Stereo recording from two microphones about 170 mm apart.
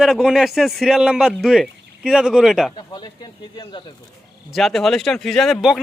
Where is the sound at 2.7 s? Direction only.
25° left (ahead or behind).